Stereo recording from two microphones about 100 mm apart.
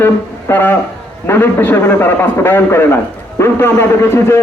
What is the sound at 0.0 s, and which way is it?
A man's voice, 20° left (ahead or behind).